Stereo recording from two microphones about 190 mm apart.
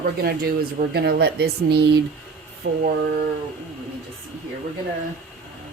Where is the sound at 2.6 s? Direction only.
80° right.